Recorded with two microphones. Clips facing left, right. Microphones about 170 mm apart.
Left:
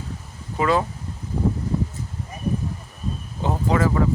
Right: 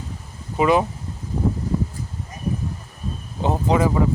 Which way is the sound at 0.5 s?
20° right (ahead or behind).